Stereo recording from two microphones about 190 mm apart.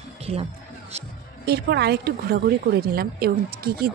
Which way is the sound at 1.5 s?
60° right (ahead or behind).